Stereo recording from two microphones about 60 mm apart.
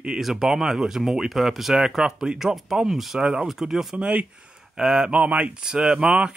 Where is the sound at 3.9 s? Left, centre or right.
Centre.